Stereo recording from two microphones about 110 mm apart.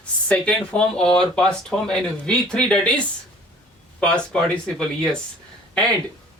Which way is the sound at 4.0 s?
10° left (ahead or behind).